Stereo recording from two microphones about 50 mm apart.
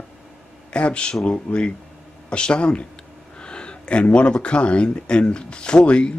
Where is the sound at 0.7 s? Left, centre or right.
Left.